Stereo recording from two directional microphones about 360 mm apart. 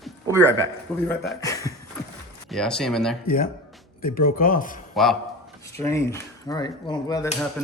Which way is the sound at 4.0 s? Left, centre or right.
Left.